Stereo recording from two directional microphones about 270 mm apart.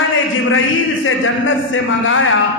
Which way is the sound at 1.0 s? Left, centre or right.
Left.